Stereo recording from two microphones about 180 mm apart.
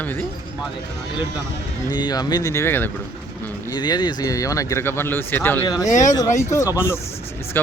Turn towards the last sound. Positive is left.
turn(degrees=15)  # may be behind; listen again after turning